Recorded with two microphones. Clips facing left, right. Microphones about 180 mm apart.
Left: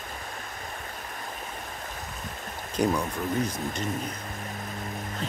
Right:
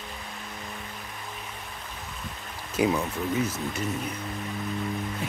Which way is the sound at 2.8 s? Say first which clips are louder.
Right 1 dB; 5° right (ahead or behind).